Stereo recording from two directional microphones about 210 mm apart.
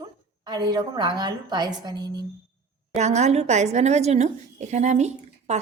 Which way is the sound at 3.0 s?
30° right (ahead or behind).